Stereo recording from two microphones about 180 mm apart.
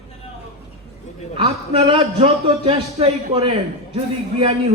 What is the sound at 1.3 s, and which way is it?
A man's voice, 30° right (ahead or behind).